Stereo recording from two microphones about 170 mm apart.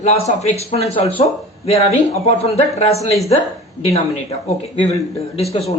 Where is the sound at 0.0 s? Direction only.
40° left (ahead or behind).